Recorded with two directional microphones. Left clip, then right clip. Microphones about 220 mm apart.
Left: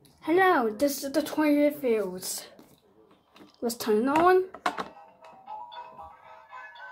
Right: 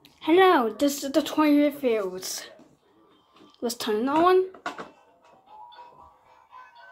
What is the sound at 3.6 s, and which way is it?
Speech, 15° left (ahead or behind).